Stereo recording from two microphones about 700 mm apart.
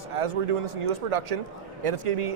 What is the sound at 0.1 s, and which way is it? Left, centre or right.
A man's voice, right.